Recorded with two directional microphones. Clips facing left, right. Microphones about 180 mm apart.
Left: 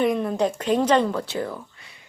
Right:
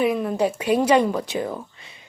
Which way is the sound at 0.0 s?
5° right (ahead or behind).